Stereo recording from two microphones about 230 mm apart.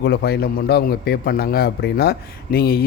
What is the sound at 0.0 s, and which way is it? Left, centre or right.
A man's voice, left.